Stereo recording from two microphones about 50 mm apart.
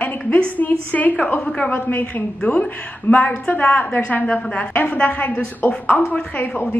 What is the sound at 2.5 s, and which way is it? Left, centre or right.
Speech, left.